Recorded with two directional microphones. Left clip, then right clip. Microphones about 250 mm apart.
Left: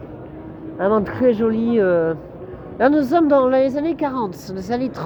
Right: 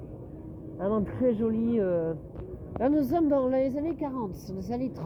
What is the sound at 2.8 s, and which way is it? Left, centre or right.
A woman's voice, centre.